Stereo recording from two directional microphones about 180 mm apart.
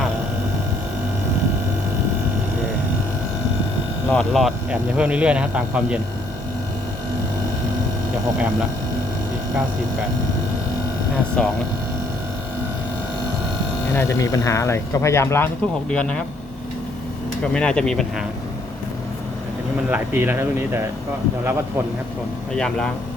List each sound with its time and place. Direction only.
4.1 s speech: 5° left (ahead or behind)
11.4 s speech: 5° left (ahead or behind)
13.9 s speech: 15° left (ahead or behind)
17.4 s speech: 5° left (ahead or behind)
19.9 s speech: 10° right (ahead or behind)
22.5 s speech: 5° left (ahead or behind)